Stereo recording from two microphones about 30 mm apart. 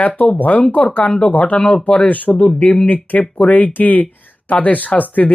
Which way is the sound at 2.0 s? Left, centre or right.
Left.